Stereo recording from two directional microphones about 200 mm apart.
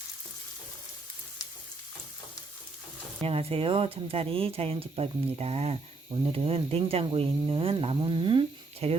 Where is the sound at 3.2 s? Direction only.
30° right (ahead or behind).